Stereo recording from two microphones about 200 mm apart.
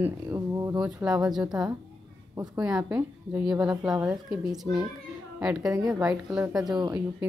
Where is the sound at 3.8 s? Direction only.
5° right (ahead or behind).